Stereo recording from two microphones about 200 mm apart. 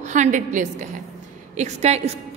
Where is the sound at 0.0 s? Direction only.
35° right (ahead or behind).